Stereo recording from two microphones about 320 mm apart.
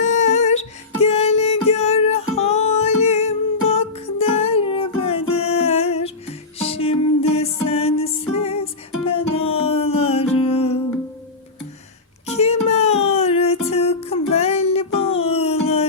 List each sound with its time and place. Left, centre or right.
0.0 s music: left
12.2 s a sound: centre
12.6 s music: centre